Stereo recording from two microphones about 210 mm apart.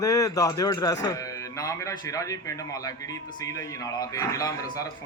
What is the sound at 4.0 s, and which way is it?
Speech, 15° left (ahead or behind).